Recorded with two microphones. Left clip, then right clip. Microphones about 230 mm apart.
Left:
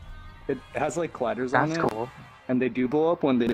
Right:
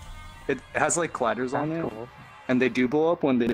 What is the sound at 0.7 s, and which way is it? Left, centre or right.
Speech, right.